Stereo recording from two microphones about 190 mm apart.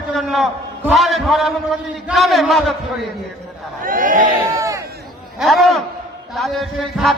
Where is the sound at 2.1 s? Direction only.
Centre (ahead or behind).